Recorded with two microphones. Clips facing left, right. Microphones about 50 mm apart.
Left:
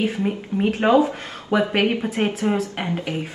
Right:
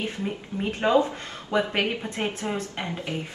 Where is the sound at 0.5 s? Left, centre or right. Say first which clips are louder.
Left 10 dB; left.